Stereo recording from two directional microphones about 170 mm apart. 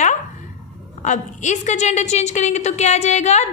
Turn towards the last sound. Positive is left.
turn(degrees=40)  # may be behind; listen again after turning